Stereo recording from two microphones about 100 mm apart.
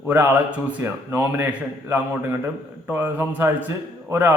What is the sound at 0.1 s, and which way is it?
Speech, 20° right (ahead or behind).